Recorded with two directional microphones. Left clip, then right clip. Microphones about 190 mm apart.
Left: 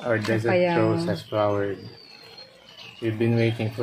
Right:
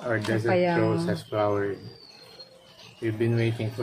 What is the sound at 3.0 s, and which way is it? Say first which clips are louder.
Speech: left 3 dB; 25° left (ahead or behind).